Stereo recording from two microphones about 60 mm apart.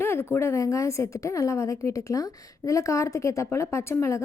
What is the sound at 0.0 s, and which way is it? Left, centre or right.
A woman's voice, left.